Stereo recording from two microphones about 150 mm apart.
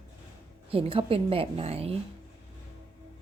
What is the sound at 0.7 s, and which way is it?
A woman's voice, 40° right (ahead or behind).